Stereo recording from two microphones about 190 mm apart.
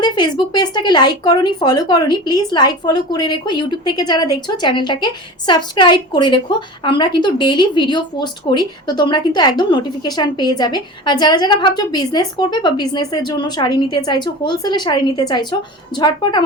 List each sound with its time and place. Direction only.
0.0 s speech: 20° left (ahead or behind)